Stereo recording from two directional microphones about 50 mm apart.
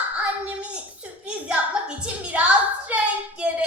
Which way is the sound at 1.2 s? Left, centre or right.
Right.